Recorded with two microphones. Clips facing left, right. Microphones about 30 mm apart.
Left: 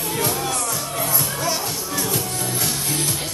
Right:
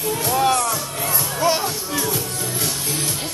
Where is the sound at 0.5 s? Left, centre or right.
Right.